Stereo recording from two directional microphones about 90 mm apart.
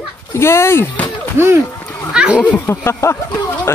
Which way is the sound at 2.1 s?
10° right (ahead or behind).